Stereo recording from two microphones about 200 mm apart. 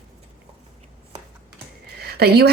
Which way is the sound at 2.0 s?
50° right (ahead or behind).